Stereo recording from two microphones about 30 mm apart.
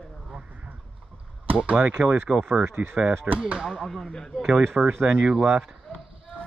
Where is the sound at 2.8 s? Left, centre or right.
Right.